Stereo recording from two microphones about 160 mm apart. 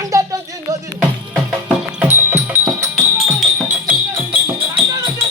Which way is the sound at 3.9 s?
10° right (ahead or behind).